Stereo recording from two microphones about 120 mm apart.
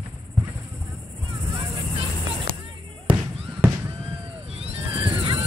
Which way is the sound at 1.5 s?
40° right (ahead or behind).